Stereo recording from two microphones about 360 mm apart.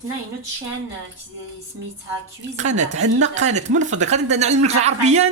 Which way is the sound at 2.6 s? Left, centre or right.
Centre.